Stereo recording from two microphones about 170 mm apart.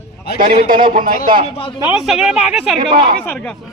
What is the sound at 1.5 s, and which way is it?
Speech, 30° left (ahead or behind).